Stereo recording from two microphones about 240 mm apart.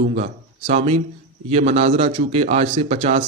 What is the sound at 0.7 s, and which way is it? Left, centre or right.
A man's voice, right.